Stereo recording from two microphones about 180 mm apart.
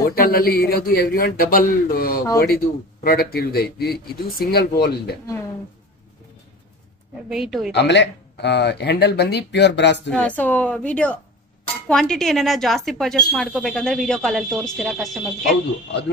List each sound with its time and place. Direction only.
0.0 s a man's voice: 55° left (ahead or behind)
7.2 s speech: 5° right (ahead or behind)
7.7 s speech: 75° left (ahead or behind)
10.0 s a woman's voice: 5° left (ahead or behind)